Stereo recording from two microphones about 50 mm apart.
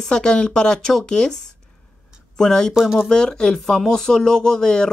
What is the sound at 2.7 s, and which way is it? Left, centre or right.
Speech, centre.